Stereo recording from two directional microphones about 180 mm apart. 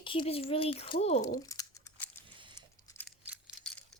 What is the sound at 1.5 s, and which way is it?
Crumpling, 20° left (ahead or behind).